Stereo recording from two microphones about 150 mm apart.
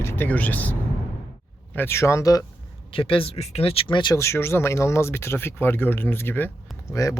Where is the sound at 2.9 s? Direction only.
35° left (ahead or behind).